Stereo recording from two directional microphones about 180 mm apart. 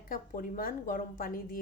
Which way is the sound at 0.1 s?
50° left (ahead or behind).